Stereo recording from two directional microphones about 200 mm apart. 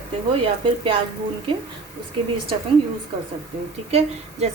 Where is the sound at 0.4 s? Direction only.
25° right (ahead or behind).